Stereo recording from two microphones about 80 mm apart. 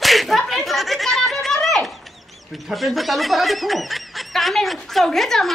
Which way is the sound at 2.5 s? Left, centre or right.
Centre.